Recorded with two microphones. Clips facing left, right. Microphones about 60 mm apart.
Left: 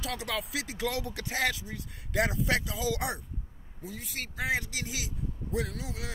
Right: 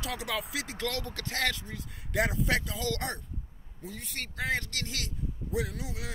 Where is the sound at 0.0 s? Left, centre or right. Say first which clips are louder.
Even; centre.